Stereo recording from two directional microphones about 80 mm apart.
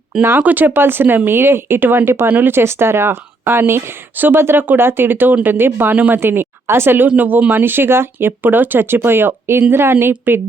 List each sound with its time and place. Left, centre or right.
0.2 s speech: right